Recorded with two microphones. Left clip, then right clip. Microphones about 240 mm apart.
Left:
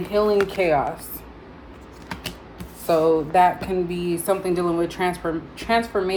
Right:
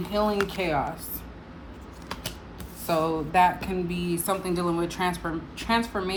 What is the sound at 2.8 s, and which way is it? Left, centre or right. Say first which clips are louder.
Speech: left 7 dB; centre.